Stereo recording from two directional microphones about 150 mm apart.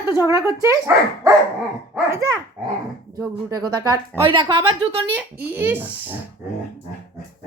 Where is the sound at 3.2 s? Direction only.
25° right (ahead or behind).